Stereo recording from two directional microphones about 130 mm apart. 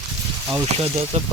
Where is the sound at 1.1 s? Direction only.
60° right (ahead or behind).